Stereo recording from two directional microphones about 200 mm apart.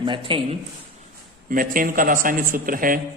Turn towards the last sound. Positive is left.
turn(degrees=-45)  # may be behind; listen again after turning